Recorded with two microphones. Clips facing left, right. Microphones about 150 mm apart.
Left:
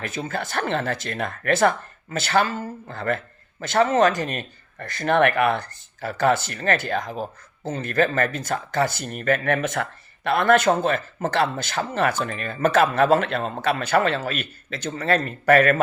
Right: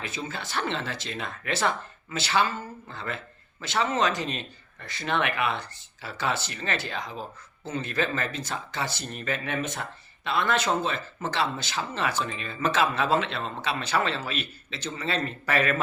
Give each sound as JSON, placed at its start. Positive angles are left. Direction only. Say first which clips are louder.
{"t": 0.0, "sound": "speech", "louder": "left 6 dB", "side_deg": 50}